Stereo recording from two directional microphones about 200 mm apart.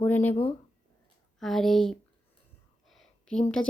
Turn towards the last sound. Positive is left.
turn(degrees=5)  # may be behind; listen again after turning